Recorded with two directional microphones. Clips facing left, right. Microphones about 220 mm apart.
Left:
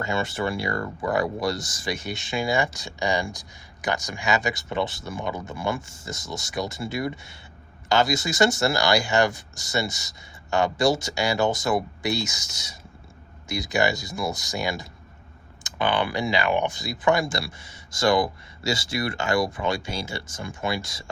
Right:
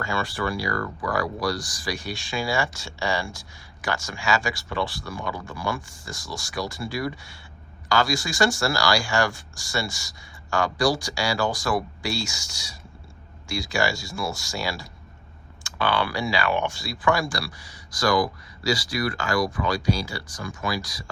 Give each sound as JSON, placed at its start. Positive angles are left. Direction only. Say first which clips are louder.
{"t": 0.0, "sound": "speech", "louder": "left 1 dB", "side_deg": 20}